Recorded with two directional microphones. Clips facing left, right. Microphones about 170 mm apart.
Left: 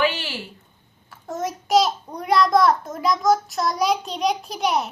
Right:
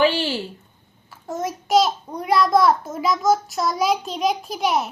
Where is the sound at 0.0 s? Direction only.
30° right (ahead or behind).